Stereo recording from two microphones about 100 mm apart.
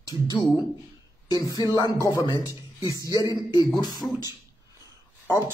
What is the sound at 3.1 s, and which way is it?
Speech, 40° right (ahead or behind).